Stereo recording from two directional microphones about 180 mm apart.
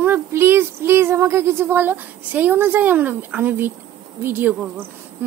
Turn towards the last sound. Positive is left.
turn(degrees=-10)  # may be behind; listen again after turning